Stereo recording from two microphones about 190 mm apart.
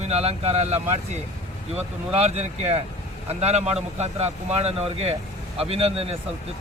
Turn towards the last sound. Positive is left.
turn(degrees=-30)  # may be behind; listen again after turning